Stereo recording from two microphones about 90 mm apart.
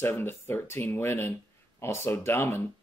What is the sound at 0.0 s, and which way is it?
Speech, 25° left (ahead or behind).